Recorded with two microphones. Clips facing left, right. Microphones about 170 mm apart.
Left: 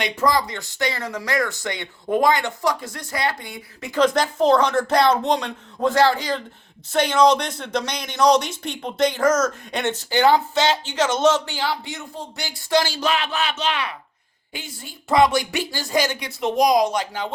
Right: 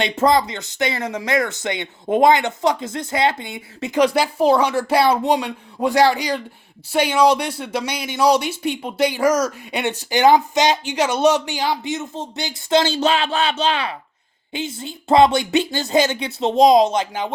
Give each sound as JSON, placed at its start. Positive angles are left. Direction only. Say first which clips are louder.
{"t": 0.0, "sound": "speech", "louder": "right 4 dB", "side_deg": -25}
{"t": 4.0, "sound": "speech", "louder": "right 1 dB", "side_deg": -10}